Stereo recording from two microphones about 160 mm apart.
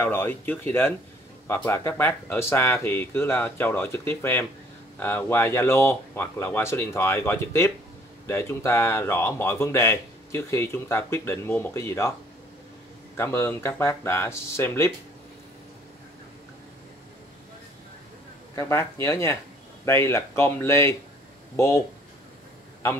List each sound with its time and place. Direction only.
0.0 s speech: 15° left (ahead or behind)
13.1 s speech: 15° left (ahead or behind)
18.5 s speech: 20° left (ahead or behind)